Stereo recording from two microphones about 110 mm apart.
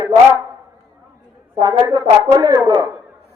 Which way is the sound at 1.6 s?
30° right (ahead or behind).